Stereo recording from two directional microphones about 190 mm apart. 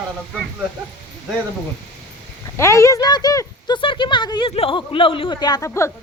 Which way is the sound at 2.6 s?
15° left (ahead or behind).